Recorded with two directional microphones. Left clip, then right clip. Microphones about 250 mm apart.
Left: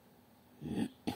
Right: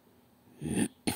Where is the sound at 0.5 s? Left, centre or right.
Right.